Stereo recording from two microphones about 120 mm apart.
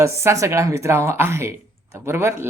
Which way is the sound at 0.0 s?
25° right (ahead or behind).